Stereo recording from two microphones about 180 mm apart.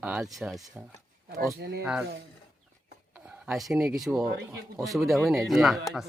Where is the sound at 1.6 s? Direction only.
65° right (ahead or behind).